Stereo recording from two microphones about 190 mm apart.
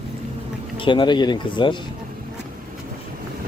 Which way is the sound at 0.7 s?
25° left (ahead or behind).